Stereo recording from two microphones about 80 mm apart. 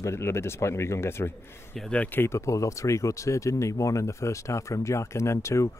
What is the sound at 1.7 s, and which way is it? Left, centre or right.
Speech, centre.